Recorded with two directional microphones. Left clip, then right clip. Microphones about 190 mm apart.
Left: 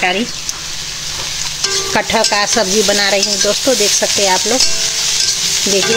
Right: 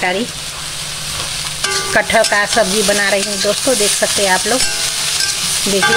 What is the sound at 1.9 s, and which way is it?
Sizzle, 25° left (ahead or behind).